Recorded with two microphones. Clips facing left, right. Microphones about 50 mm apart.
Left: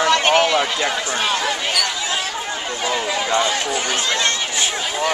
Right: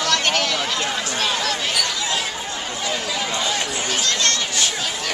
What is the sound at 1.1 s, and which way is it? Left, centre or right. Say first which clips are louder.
Speech: left 1 dB; centre.